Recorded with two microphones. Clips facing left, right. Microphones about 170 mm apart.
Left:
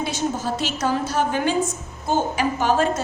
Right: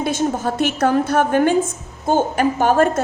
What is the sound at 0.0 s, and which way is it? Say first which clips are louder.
A woman's voice: right 5 dB; 50° right (ahead or behind).